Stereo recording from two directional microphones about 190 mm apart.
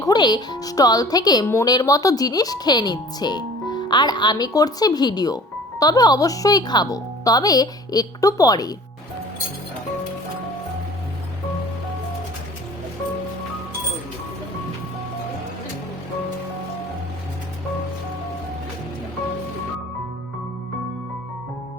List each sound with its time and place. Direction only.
0.0 s speech: 20° left (ahead or behind)